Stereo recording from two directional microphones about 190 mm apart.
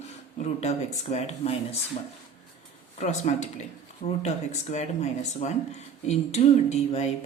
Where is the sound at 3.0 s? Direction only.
40° left (ahead or behind).